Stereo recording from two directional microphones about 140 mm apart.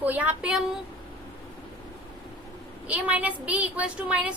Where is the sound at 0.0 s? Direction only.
10° right (ahead or behind).